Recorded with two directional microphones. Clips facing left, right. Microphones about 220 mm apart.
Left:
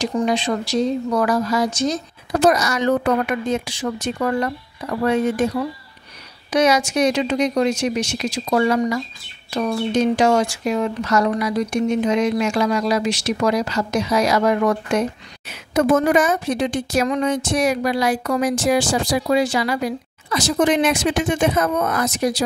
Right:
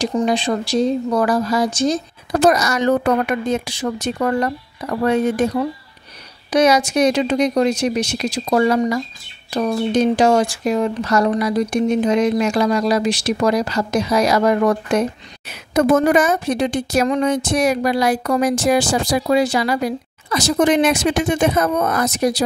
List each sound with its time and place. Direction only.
0.0 s speech: 30° right (ahead or behind)
2.6 s speech: 40° right (ahead or behind)
6.5 s speech: 35° right (ahead or behind)